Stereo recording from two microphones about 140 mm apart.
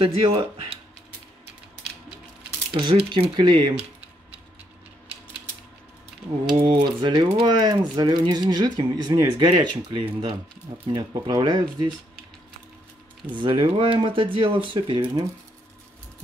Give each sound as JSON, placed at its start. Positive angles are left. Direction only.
{"t": 0.0, "sound": "speech", "side_deg": -40}
{"t": 2.7, "sound": "speech", "side_deg": -35}
{"t": 6.7, "sound": "speech", "side_deg": -35}
{"t": 13.3, "sound": "speech", "side_deg": -35}